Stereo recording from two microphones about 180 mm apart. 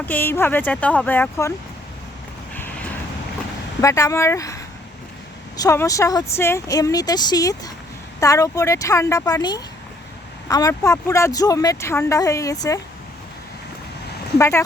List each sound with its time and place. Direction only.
0.0 s speech: 10° left (ahead or behind)
2.6 s vehicle: 10° left (ahead or behind)
3.8 s speech: 15° left (ahead or behind)
14.3 s speech: 15° left (ahead or behind)